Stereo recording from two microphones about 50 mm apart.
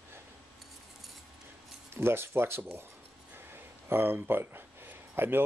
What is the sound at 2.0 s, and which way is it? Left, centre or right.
Speech, right.